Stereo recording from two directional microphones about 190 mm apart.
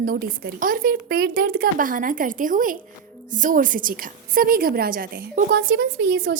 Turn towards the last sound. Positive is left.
turn(degrees=-50)  # may be behind; listen again after turning